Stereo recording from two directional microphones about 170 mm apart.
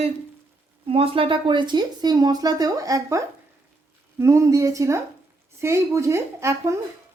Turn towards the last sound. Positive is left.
turn(degrees=-15)  # may be behind; listen again after turning